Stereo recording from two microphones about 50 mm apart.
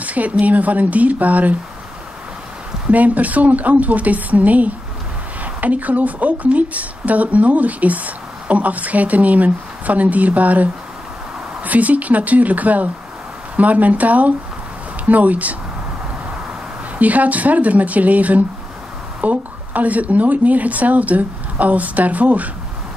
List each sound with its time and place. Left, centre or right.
0.0 s speech: right
2.9 s speech: right
17.0 s speech: right